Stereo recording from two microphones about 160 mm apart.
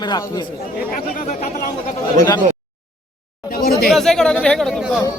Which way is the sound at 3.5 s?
70° left (ahead or behind).